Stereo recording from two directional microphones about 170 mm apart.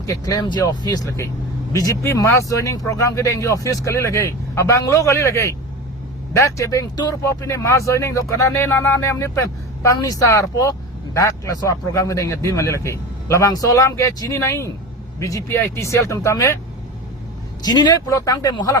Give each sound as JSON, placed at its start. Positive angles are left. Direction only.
{"t": 0.0, "sound": "speech", "side_deg": 20}
{"t": 17.7, "sound": "speech", "side_deg": 25}